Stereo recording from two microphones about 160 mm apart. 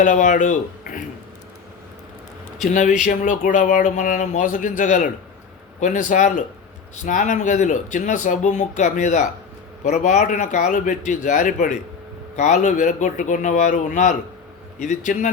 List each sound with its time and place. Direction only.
0.0 s speech: 50° left (ahead or behind)
2.6 s speech: 50° left (ahead or behind)